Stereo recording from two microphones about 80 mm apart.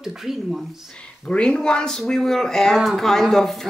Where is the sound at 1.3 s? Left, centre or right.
Centre.